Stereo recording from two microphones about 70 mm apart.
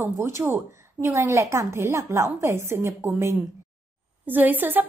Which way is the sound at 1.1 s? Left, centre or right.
Right.